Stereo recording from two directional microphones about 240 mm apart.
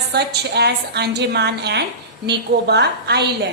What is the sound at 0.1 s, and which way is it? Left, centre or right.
A woman's voice, right.